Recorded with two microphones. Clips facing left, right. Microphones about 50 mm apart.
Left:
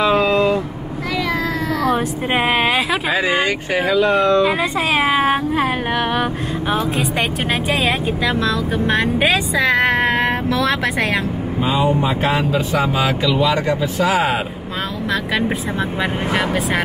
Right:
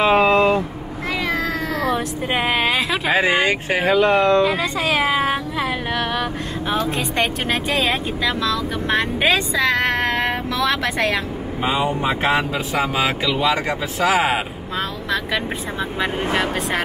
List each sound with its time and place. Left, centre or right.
0.0 s vehicle: right
1.9 s vehicle: centre
3.1 s speech: right
4.5 s speech: centre
6.7 s speech: centre
12.9 s speech: centre
13.5 s speech: right